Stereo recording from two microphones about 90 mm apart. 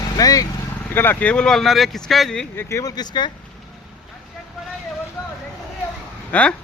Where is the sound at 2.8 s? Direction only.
50° left (ahead or behind).